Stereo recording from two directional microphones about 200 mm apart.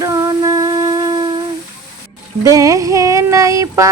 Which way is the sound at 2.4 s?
15° right (ahead or behind).